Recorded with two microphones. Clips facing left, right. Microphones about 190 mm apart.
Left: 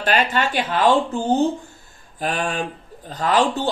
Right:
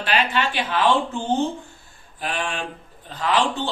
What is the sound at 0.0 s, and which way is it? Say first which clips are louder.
Speech: left 2 dB; 45° left (ahead or behind).